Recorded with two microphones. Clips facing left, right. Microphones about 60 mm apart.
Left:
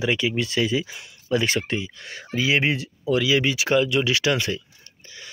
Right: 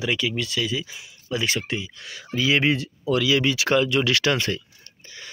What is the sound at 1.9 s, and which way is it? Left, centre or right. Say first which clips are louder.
Speech: left 1 dB; left.